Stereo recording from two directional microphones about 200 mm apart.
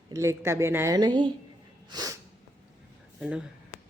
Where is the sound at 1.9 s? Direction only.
20° right (ahead or behind).